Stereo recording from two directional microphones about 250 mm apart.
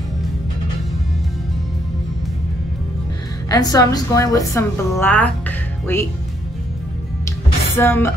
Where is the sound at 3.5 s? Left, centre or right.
Centre.